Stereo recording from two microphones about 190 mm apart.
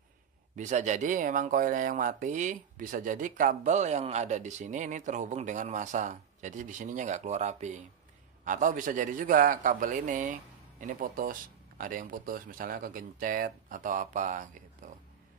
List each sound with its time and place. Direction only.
0.6 s speech: 40° right (ahead or behind)